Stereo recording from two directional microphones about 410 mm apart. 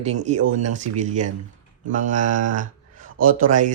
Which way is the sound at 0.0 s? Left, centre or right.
Centre.